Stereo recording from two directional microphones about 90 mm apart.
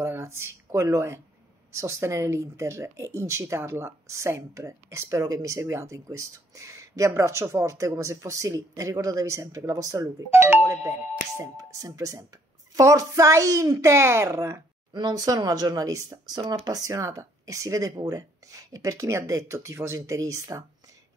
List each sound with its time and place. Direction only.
0.0 s speech: 30° right (ahead or behind)
10.3 s doorbell: 25° right (ahead or behind)
11.3 s speech: 40° right (ahead or behind)
14.9 s speech: 50° right (ahead or behind)